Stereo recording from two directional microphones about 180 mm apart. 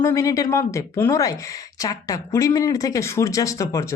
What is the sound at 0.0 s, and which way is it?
Speech, 20° left (ahead or behind).